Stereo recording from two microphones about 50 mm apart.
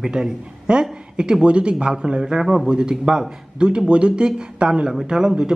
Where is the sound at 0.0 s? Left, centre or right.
Centre.